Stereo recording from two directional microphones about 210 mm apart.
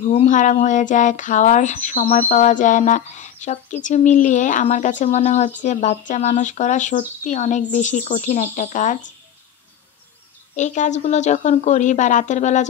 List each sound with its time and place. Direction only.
0.0 s speech: 35° left (ahead or behind)
10.5 s speech: 35° left (ahead or behind)